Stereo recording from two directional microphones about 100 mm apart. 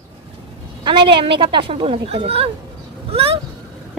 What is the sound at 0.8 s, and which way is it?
A woman's voice, 55° right (ahead or behind).